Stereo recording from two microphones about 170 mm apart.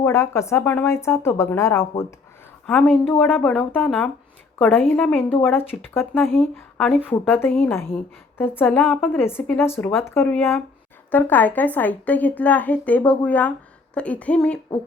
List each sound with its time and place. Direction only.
0.0 s a woman's voice: 15° left (ahead or behind)
9.1 s a woman's voice: 15° left (ahead or behind)